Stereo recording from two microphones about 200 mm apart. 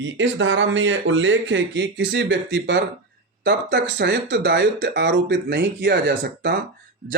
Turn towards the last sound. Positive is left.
turn(degrees=-55)  # may be behind; listen again after turning